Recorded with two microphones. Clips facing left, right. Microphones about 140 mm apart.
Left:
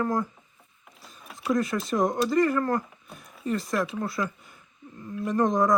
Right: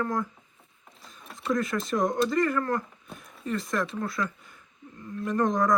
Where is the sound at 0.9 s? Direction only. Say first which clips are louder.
Even; centre (ahead or behind).